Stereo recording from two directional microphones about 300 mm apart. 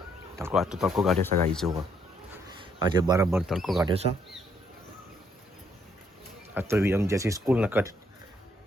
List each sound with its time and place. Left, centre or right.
0.3 s speech: centre
2.6 s speech: centre
3.2 s speech: centre
3.8 s speech: centre
6.5 s speech: centre